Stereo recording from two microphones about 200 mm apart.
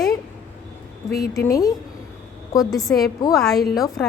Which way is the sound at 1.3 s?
15° left (ahead or behind).